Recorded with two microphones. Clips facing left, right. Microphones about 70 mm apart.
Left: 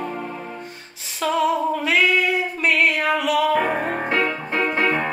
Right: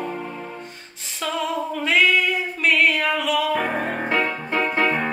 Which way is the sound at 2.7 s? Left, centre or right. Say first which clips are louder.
Even; centre.